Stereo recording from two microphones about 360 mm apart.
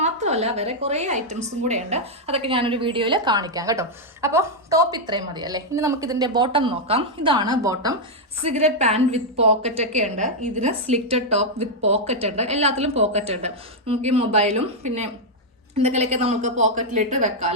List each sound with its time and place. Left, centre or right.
0.0 s a woman's voice: centre